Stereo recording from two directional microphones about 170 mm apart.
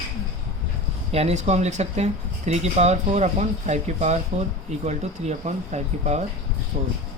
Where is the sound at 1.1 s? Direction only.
40° right (ahead or behind).